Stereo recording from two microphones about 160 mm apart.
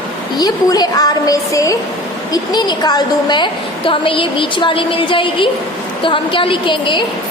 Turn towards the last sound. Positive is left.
turn(degrees=30)  # may be behind; listen again after turning